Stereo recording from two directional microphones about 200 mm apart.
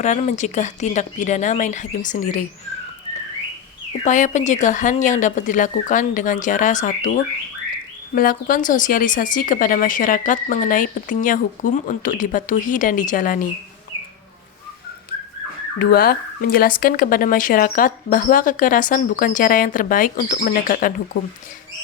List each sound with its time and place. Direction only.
0.0 s speech: 35° left (ahead or behind)
4.0 s speech: 40° left (ahead or behind)
8.1 s speech: 45° left (ahead or behind)
15.8 s speech: 50° left (ahead or behind)